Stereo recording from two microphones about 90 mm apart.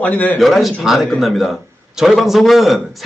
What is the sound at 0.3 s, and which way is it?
A man's voice, centre (ahead or behind).